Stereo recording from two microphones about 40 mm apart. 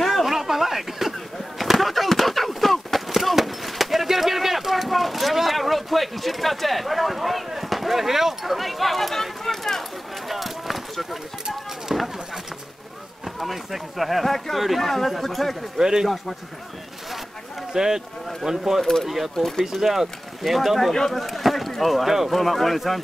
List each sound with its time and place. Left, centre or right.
0.0 s a sound: centre
13.4 s speech: centre
15.8 s speech: centre
17.7 s speech: centre
18.8 s speech: centre
19.0 s speech: centre
19.3 s speech: centre
19.6 s speech: centre